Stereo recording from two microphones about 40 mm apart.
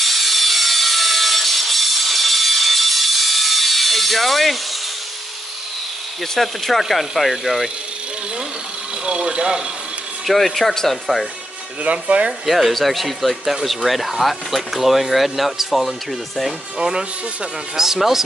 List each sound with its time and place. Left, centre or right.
0.0 s sawing: centre
6.3 s speech: centre
9.0 s speech: right
10.2 s speech: centre
11.8 s speech: right
12.4 s speech: centre
16.7 s speech: centre